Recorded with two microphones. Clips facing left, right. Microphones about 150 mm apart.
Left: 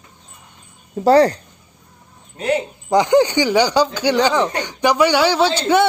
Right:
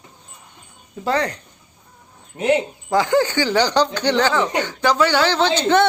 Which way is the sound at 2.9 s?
20° left (ahead or behind).